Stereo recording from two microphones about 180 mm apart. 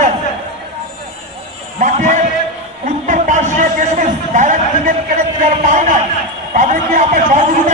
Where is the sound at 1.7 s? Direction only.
45° right (ahead or behind).